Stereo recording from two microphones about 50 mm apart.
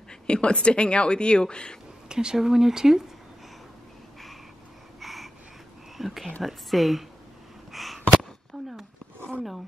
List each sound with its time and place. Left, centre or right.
0.3 s speech: centre
2.0 s speech: centre
5.0 s a sound: centre
5.9 s whispering: centre
6.4 s speech: centre
7.7 s a sound: centre